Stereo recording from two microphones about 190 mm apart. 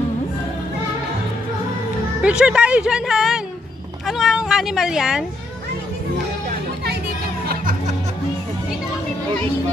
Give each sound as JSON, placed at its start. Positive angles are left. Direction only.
{"t": 2.2, "sound": "speech", "side_deg": -5}